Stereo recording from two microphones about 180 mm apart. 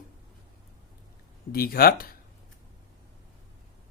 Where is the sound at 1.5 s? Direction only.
55° left (ahead or behind).